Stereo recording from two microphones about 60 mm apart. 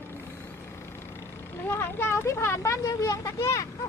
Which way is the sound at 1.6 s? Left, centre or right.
Left.